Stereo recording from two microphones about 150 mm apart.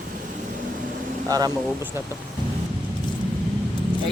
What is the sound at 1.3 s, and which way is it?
Speech, 25° right (ahead or behind).